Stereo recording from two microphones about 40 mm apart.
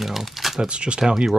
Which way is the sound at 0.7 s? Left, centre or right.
Right.